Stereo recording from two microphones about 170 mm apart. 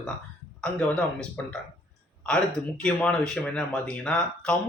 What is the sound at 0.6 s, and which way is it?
A man's voice, 5° left (ahead or behind).